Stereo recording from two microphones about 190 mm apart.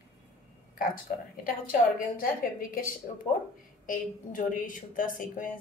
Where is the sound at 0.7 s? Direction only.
45° left (ahead or behind).